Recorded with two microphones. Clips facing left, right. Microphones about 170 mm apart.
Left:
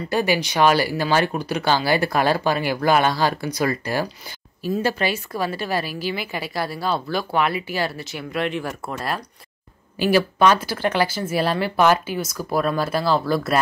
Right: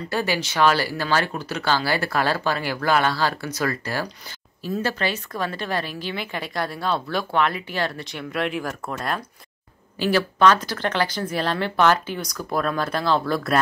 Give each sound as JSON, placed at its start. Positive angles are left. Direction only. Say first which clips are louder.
{"t": 0.1, "sound": "speech", "louder": "left 4 dB", "side_deg": 15}
{"t": 9.9, "sound": "speech", "louder": "left 3 dB", "side_deg": 15}